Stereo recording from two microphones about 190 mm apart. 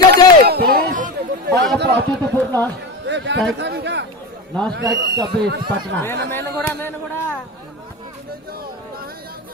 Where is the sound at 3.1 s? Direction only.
65° right (ahead or behind).